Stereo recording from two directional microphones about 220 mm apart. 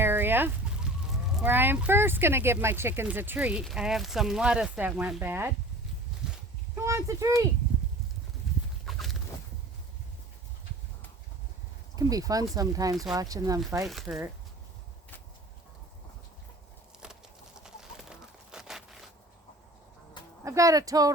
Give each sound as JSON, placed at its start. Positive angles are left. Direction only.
{"t": 0.0, "sound": "a sound", "side_deg": -10}
{"t": 1.4, "sound": "speech", "side_deg": -10}
{"t": 6.7, "sound": "a child's voice", "side_deg": -15}
{"t": 8.9, "sound": "fowl", "side_deg": 0}
{"t": 11.9, "sound": "speech", "side_deg": -15}
{"t": 13.8, "sound": "speech", "side_deg": 0}
{"t": 17.6, "sound": "bird", "side_deg": -5}
{"t": 20.4, "sound": "speech", "side_deg": -15}